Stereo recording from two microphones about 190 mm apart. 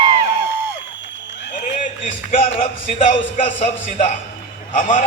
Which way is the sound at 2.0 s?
35° left (ahead or behind).